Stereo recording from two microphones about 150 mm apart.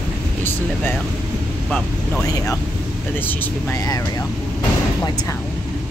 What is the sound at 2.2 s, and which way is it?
Speech, 20° left (ahead or behind).